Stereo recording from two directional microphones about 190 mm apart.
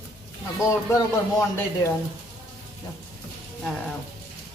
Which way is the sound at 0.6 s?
15° left (ahead or behind).